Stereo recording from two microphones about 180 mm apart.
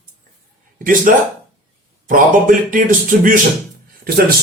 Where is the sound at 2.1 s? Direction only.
45° right (ahead or behind).